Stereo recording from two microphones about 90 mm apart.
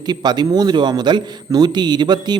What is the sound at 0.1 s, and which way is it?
Speech, 50° right (ahead or behind).